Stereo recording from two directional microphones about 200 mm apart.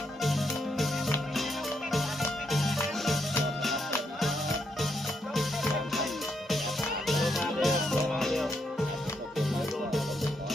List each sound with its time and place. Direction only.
0.2 s music: centre (ahead or behind)
2.5 s music: centre (ahead or behind)
4.2 s music: centre (ahead or behind)
7.1 s music: centre (ahead or behind)